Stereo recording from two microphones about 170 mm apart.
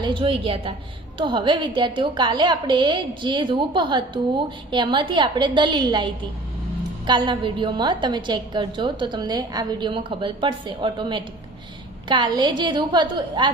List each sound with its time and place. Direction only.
0.0 s a woman's voice: 30° right (ahead or behind)
7.1 s a woman's voice: 30° right (ahead or behind)